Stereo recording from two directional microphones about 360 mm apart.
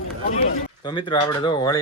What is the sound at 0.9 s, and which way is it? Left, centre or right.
Speech, centre.